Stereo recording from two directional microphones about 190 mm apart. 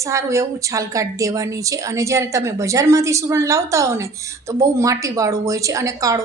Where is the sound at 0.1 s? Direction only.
15° right (ahead or behind).